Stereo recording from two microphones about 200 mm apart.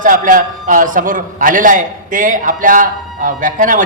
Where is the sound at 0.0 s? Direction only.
40° right (ahead or behind).